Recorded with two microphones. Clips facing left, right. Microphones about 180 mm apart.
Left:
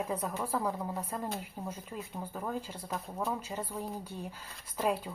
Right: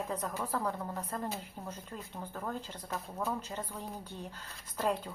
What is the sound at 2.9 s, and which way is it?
Speech, centre (ahead or behind).